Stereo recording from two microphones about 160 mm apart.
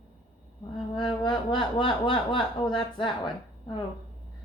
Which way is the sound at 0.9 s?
30° left (ahead or behind).